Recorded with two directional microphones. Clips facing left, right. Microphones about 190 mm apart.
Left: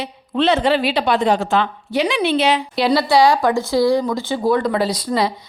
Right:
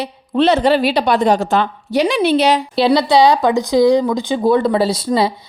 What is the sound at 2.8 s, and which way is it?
Speech, 20° right (ahead or behind).